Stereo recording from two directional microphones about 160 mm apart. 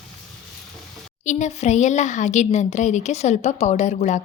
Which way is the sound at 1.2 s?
50° left (ahead or behind).